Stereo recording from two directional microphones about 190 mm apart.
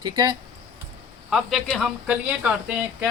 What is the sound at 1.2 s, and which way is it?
A woman's voice, centre (ahead or behind).